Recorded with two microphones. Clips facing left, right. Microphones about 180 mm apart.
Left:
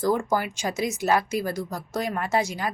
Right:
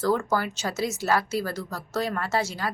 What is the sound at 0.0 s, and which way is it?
Speech, 15° left (ahead or behind).